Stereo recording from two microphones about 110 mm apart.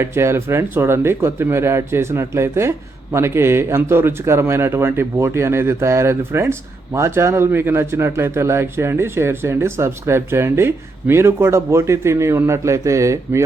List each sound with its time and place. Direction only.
0.0 s speech: 25° right (ahead or behind)